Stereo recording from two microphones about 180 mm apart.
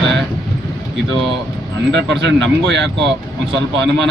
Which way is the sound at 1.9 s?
75° right (ahead or behind).